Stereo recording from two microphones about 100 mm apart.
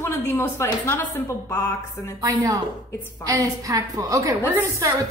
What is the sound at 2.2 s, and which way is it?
A woman's voice, 40° right (ahead or behind).